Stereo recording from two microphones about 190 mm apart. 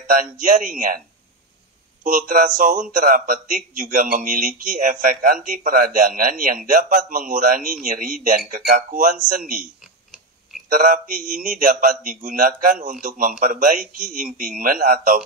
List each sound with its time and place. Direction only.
0.0 s a man's voice: 45° right (ahead or behind)
2.0 s a man's voice: 45° right (ahead or behind)
10.9 s a man's voice: 45° right (ahead or behind)